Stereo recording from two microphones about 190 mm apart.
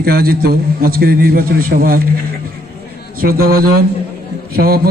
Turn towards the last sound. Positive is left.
turn(degrees=-50)  # may be behind; listen again after turning